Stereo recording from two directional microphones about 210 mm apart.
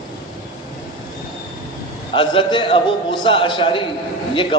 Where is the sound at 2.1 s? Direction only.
25° left (ahead or behind).